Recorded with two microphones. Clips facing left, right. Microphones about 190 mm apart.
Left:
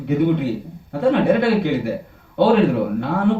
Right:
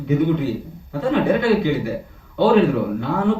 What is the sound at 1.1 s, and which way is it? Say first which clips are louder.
Speech: right 1 dB; 55° left (ahead or behind).